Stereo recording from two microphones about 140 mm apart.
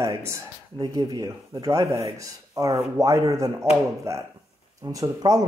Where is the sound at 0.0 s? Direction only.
20° right (ahead or behind).